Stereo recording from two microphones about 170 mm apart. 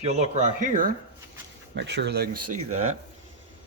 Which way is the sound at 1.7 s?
90° right.